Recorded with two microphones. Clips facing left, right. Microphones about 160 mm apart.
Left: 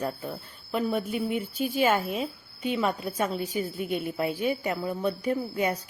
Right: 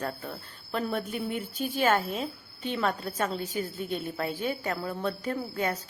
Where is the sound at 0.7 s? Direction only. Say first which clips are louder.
Left 3 dB; 5° left (ahead or behind).